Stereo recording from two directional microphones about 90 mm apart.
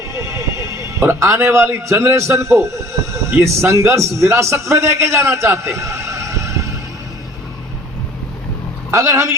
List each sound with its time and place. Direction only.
0.1 s a man's voice: 35° right (ahead or behind)
8.9 s a man's voice: 35° right (ahead or behind)